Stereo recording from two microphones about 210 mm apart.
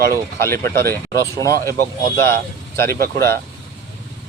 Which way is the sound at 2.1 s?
15° left (ahead or behind).